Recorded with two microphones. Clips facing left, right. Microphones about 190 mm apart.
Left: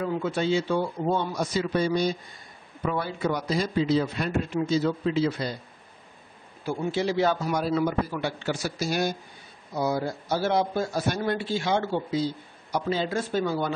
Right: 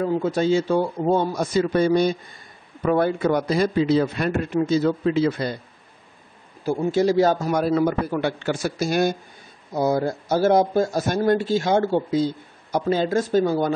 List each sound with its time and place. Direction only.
0.0 s a man's voice: 40° right (ahead or behind); by 5.6 s 60° right (ahead or behind)
6.6 s a man's voice: 45° right (ahead or behind)